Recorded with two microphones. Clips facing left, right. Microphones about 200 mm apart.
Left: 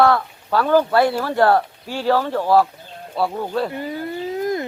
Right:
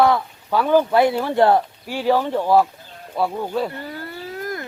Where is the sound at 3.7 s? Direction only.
15° left (ahead or behind).